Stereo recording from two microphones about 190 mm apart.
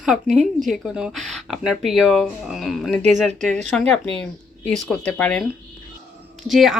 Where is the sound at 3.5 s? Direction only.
40° right (ahead or behind).